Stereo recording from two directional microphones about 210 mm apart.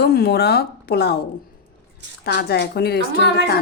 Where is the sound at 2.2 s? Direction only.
50° left (ahead or behind).